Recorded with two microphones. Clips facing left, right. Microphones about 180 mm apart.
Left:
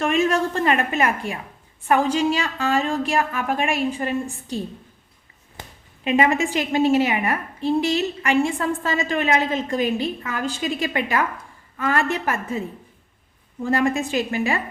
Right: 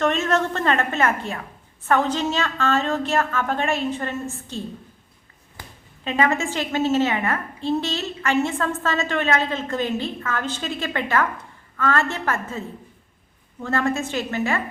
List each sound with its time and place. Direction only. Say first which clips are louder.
0.0 s a woman's voice: left 1 dB; 10° left (ahead or behind)
6.1 s a woman's voice: left 3 dB; 15° left (ahead or behind)